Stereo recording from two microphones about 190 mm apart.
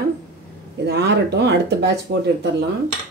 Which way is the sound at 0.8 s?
65° right (ahead or behind).